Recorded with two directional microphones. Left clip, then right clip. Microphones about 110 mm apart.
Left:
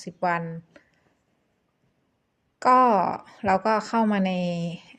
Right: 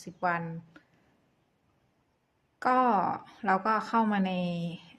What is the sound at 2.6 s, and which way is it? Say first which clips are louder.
Speech: left 7 dB; 45° left (ahead or behind).